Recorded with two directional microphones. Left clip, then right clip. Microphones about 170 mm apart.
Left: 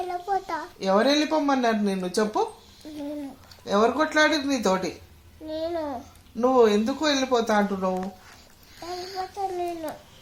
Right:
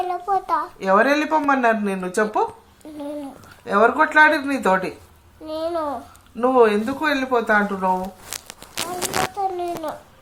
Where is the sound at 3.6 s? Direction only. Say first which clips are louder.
Right 5 dB; 15° right (ahead or behind).